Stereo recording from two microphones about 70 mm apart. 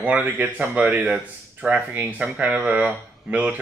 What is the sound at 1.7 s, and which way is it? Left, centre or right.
Speech, right.